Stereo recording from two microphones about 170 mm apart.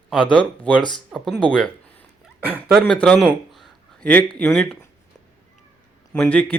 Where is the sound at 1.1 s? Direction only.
Centre (ahead or behind).